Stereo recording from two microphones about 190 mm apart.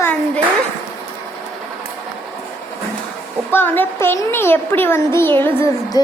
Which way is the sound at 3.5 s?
10° left (ahead or behind).